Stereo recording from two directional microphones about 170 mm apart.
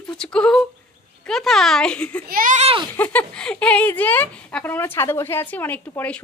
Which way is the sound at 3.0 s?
10° left (ahead or behind).